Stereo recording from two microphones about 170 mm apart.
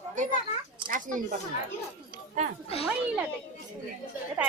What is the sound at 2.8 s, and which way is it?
Speech, 5° right (ahead or behind).